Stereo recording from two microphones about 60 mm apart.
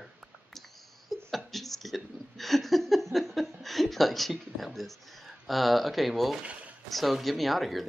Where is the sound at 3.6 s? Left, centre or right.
Centre.